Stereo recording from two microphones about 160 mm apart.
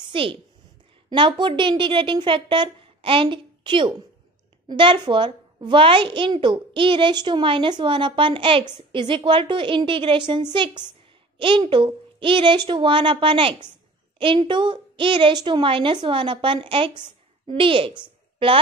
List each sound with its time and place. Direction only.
0.0 s a woman's voice: 35° right (ahead or behind)